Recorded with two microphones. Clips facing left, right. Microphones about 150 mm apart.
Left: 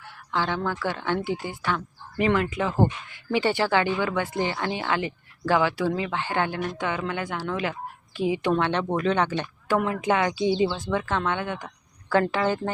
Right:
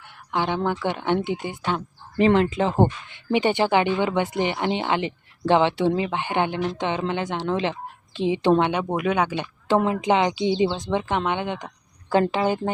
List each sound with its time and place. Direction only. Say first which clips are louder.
0.3 s speech: right 3 dB; 20° right (ahead or behind)
9.6 s speech: right 4 dB; 20° right (ahead or behind)